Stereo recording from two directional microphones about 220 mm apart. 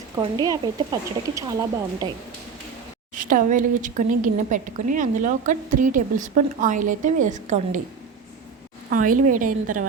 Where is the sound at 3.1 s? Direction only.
35° right (ahead or behind).